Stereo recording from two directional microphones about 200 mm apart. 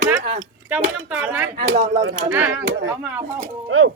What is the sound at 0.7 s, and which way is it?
Speech, 5° right (ahead or behind).